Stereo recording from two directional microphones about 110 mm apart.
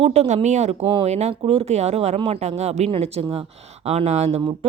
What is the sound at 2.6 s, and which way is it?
Speech, 90° right.